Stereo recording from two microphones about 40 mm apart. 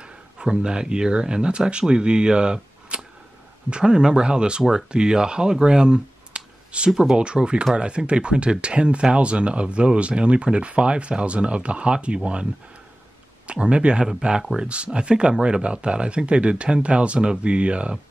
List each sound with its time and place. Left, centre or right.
0.0 s speech: right
6.9 s speech: centre
7.2 s speech: right
13.5 s speech: right